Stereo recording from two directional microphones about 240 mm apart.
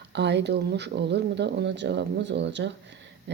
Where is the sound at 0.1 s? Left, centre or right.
Right.